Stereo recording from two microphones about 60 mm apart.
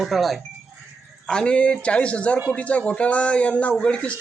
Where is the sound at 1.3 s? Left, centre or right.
Centre.